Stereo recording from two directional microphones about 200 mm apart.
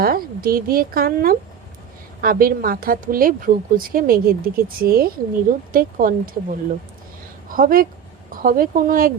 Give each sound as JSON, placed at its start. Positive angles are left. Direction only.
{"t": 0.0, "sound": "a woman's voice", "side_deg": -45}